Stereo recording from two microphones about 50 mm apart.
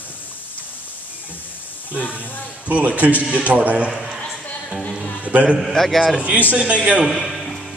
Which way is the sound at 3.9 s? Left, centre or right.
Centre.